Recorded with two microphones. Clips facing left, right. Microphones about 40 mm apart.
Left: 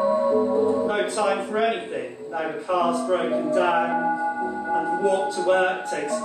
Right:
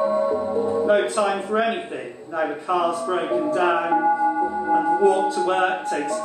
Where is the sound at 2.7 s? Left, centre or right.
Centre.